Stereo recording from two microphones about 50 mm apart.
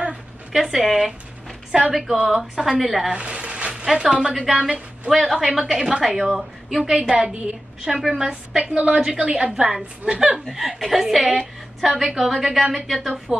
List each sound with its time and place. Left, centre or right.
0.1 s a sound: centre
1.7 s a woman's voice: centre
3.1 s a sound: centre
3.8 s a woman's voice: centre
5.1 s a woman's voice: centre
5.8 s a woman's voice: centre
9.5 s a woman's voice: centre